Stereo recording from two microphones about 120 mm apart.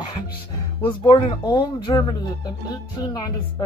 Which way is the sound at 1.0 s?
40° left (ahead or behind).